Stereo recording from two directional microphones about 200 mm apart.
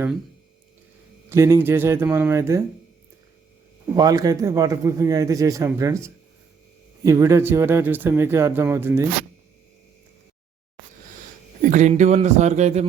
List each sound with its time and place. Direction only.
1.3 s speech: 15° right (ahead or behind)
3.9 s speech: 20° right (ahead or behind)
11.7 s speech: 35° right (ahead or behind)